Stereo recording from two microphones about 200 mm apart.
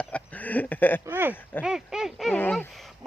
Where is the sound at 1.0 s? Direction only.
10° right (ahead or behind).